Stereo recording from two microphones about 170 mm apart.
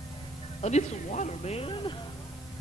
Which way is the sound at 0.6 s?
45° left (ahead or behind).